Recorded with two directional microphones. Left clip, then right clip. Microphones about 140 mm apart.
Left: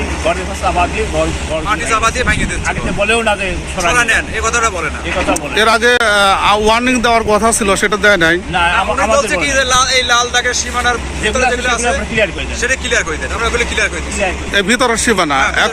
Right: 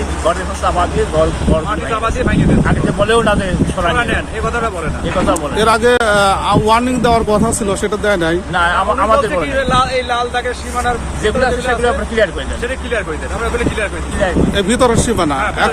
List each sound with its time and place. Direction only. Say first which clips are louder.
1.9 s speech: left 4 dB; 50° right (ahead or behind)
3.1 s speech: right 1 dB; 20° right (ahead or behind)
3.9 s speech: left 4 dB; 55° right (ahead or behind)
5.5 s speech: left 2 dB; centre (ahead or behind)
8.5 s speech: even; 25° right (ahead or behind)
9.3 s speech: left 2 dB; 50° right (ahead or behind)
12.6 s speech: left 5 dB; 50° right (ahead or behind)
14.5 s speech: left 3 dB; centre (ahead or behind)